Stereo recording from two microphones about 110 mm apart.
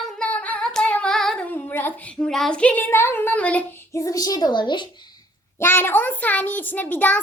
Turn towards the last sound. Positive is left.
turn(degrees=15)  # may be behind; listen again after turning